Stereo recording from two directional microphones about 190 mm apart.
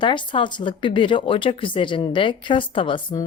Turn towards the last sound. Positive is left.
turn(degrees=25)  # may be behind; listen again after turning